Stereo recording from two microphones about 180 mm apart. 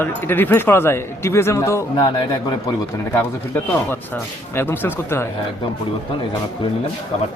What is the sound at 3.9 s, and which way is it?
Speech, 10° left (ahead or behind).